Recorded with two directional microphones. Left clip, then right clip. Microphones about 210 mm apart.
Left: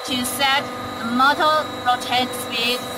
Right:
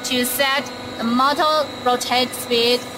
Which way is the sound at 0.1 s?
55° right (ahead or behind).